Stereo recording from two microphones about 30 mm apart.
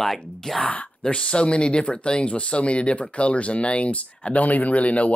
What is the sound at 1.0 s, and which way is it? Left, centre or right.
Speech, left.